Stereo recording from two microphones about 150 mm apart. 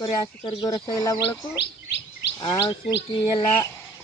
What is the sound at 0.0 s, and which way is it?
Speech, 35° left (ahead or behind).